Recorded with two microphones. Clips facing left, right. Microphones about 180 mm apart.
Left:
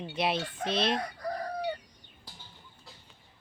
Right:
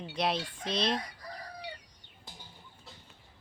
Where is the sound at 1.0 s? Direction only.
55° left (ahead or behind).